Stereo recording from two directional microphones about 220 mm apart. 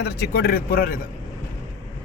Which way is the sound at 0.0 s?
45° left (ahead or behind).